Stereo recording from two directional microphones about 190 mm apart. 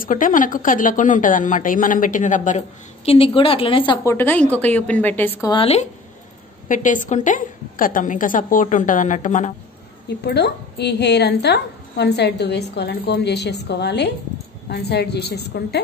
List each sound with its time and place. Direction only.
0.0 s a woman's voice: 45° left (ahead or behind)
3.1 s a woman's voice: 30° left (ahead or behind)
4.0 s a woman's voice: 10° left (ahead or behind)
5.5 s speech: 30° left (ahead or behind)
6.7 s a woman's voice: 40° left (ahead or behind)
10.0 s a woman's voice: 60° left (ahead or behind)